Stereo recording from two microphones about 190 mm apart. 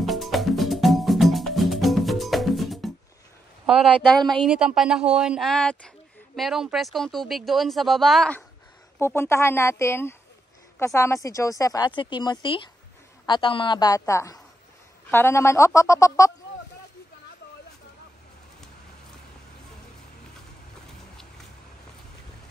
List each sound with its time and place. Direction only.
0.0 s music: centre (ahead or behind)
3.6 s speech: 5° right (ahead or behind); by 16.3 s 15° left (ahead or behind)